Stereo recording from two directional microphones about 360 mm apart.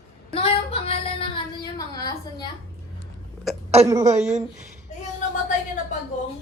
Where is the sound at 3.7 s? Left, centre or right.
Centre.